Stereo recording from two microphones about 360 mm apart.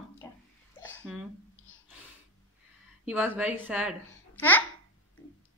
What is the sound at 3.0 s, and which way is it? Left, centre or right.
A woman's voice, centre.